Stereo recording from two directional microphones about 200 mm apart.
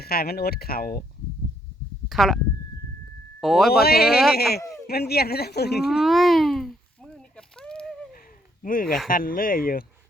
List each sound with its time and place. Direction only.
0.0 s speech: 50° left (ahead or behind)
2.0 s speech: centre (ahead or behind)
3.4 s speech: centre (ahead or behind)
3.7 s speech: 50° left (ahead or behind)
5.9 s baby cry: centre (ahead or behind)
8.2 s a sound: 45° left (ahead or behind)
9.0 s speech: 45° left (ahead or behind)